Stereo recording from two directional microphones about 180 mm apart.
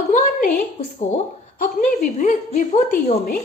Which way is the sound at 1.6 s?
45° left (ahead or behind).